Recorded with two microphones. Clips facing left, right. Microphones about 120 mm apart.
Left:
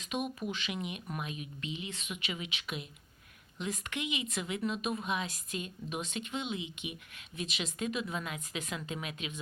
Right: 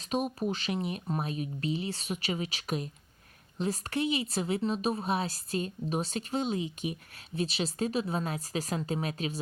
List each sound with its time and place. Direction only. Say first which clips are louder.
0.1 s a woman's voice: right 5 dB; 35° right (ahead or behind)